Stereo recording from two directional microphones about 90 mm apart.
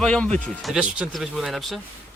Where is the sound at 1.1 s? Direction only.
5° right (ahead or behind).